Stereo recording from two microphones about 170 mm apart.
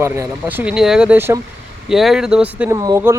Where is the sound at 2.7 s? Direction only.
20° right (ahead or behind).